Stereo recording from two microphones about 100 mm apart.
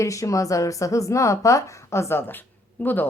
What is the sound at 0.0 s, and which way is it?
A woman's voice, 30° left (ahead or behind).